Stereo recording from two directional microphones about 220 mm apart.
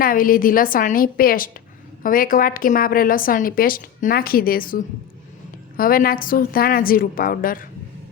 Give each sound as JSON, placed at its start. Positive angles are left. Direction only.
{"t": 0.0, "sound": "a woman's voice", "side_deg": 40}